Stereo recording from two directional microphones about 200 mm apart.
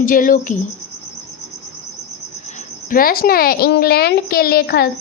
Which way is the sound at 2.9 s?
45° left (ahead or behind).